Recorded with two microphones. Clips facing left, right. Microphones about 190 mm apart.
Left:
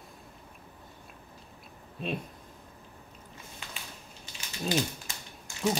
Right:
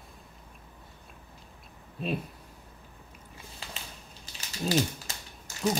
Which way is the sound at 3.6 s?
35° right (ahead or behind).